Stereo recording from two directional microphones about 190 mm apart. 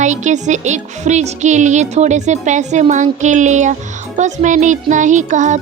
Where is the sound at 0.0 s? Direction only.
40° right (ahead or behind).